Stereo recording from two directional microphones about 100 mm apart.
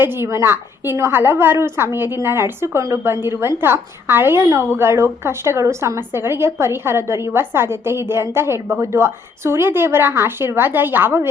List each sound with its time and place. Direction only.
0.0 s a woman's voice: 25° right (ahead or behind)